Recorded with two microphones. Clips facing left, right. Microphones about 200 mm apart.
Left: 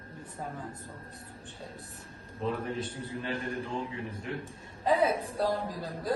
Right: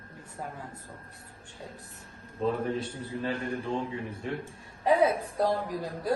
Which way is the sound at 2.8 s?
30° right (ahead or behind).